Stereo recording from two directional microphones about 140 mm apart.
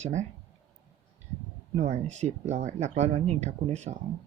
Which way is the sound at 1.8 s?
55° right (ahead or behind).